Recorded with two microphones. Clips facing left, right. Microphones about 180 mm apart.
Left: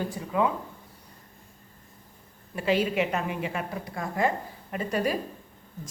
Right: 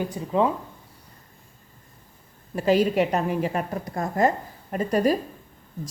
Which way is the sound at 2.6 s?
40° right (ahead or behind).